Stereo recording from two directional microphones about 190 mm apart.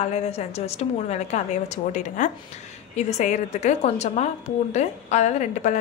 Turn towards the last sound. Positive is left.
turn(degrees=40)  # may be behind; listen again after turning